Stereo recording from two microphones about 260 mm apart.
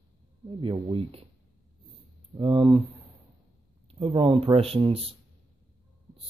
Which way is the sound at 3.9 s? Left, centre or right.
Centre.